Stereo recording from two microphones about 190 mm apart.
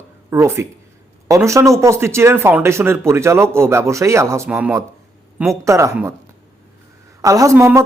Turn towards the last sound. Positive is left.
turn(degrees=-15)  # may be behind; listen again after turning